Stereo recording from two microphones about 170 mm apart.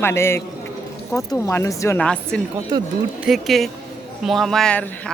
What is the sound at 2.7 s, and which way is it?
Speech, 25° right (ahead or behind).